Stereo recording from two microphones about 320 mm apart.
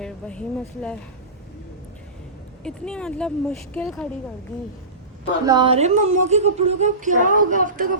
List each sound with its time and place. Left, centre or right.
0.0 s speech: centre
2.6 s speech: centre
5.5 s speech: centre